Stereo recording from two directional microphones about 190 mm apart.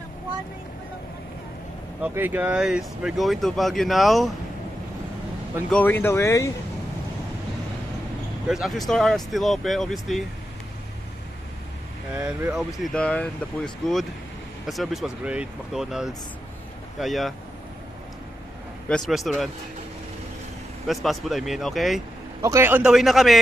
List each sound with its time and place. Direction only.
2.0 s speech: 10° right (ahead or behind)
5.7 s speech: 10° left (ahead or behind)
8.5 s speech: centre (ahead or behind)
12.1 s speech: 5° right (ahead or behind)
12.5 s speech: centre (ahead or behind)
14.7 s speech: centre (ahead or behind)
18.9 s speech: centre (ahead or behind)
20.8 s speech: centre (ahead or behind)
22.4 s speech: 15° right (ahead or behind)